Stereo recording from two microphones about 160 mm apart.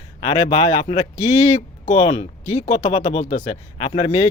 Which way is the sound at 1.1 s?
45° left (ahead or behind).